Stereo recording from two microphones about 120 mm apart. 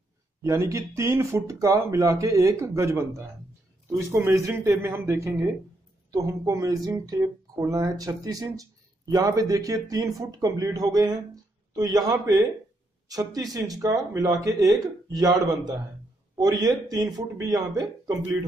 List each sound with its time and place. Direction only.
0.4 s speech: 25° right (ahead or behind)